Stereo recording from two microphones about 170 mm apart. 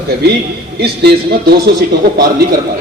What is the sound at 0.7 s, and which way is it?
Speech, 70° right (ahead or behind).